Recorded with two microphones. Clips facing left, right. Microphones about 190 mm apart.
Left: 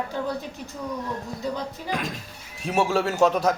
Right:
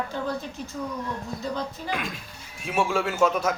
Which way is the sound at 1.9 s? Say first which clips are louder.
Left 2 dB; 40° left (ahead or behind).